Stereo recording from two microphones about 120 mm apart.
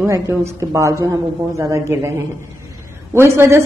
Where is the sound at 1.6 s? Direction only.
25° right (ahead or behind).